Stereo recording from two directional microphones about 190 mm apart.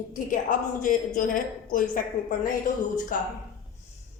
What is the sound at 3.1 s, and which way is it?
Speech, 45° left (ahead or behind).